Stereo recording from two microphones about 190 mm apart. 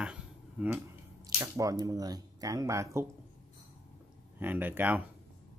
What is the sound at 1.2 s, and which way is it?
Speech, 20° right (ahead or behind).